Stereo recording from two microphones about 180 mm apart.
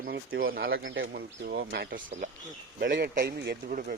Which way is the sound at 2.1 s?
40° right (ahead or behind).